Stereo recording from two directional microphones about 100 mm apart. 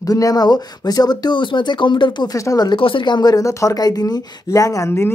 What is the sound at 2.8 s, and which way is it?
Speech, 60° left (ahead or behind).